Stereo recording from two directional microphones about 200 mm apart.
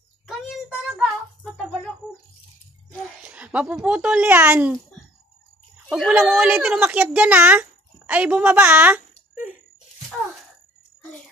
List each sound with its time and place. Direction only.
0.3 s music: centre (ahead or behind)
3.2 s speech: 5° right (ahead or behind)
5.9 s a woman's voice: centre (ahead or behind)